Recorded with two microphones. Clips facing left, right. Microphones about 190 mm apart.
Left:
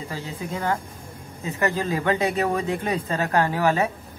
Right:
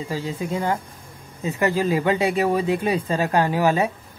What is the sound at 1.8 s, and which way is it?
A woman's voice, 10° right (ahead or behind).